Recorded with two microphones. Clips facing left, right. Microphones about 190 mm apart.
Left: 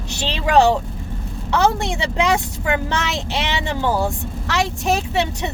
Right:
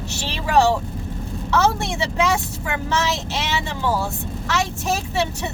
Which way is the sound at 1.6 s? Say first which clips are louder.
Left 4 dB; 15° left (ahead or behind).